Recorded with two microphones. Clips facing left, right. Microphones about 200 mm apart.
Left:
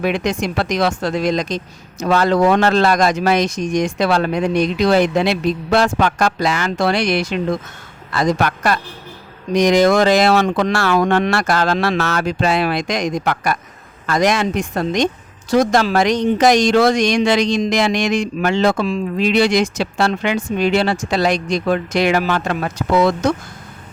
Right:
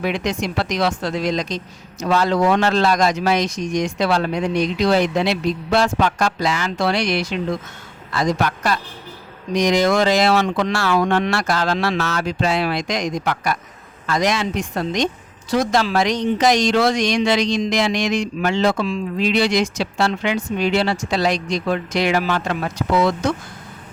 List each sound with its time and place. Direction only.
0.0 s a woman's voice: 50° left (ahead or behind)
8.1 s a man's voice: 60° left (ahead or behind)